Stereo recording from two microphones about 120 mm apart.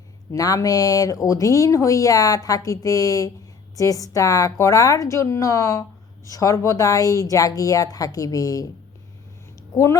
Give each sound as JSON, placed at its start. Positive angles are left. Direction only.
{"t": 0.3, "sound": "speech", "side_deg": 30}
{"t": 9.7, "sound": "speech", "side_deg": 25}